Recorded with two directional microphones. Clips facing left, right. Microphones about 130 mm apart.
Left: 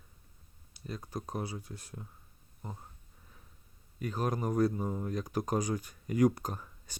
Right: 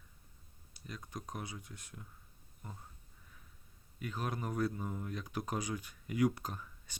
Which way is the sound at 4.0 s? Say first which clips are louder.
Left 6 dB; 40° left (ahead or behind).